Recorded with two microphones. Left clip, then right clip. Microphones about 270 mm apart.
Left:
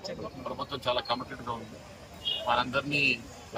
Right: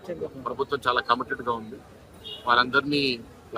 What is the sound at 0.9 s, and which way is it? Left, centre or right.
Speech, right.